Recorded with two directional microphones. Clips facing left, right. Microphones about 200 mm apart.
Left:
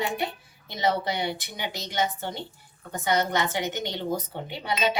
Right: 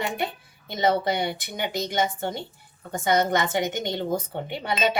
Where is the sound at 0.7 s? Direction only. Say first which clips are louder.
Right 3 dB; 50° right (ahead or behind).